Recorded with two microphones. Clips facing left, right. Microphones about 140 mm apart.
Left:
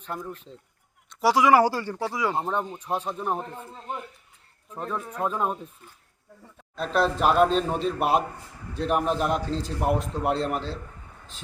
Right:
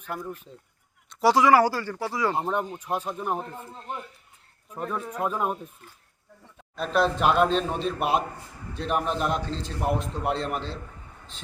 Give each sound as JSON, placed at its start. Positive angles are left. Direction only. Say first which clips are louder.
{"t": 0.1, "sound": "a man's voice", "louder": "even", "side_deg": -5}
{"t": 1.5, "sound": "speech", "louder": "even", "side_deg": 20}
{"t": 2.3, "sound": "speech", "louder": "even", "side_deg": -10}
{"t": 4.7, "sound": "a man's voice", "louder": "right 1 dB", "side_deg": -10}